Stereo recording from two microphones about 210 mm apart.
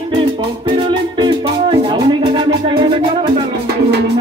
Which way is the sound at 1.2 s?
20° right (ahead or behind).